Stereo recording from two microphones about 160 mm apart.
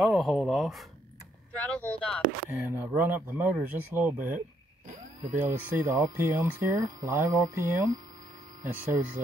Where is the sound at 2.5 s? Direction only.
10° right (ahead or behind).